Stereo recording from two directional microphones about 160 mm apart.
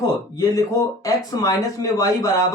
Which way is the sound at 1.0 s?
20° left (ahead or behind).